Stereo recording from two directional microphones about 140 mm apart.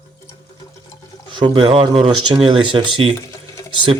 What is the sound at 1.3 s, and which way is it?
Speech, 35° right (ahead or behind).